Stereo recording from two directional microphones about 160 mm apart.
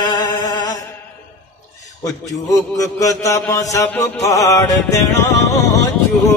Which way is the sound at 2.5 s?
20° left (ahead or behind).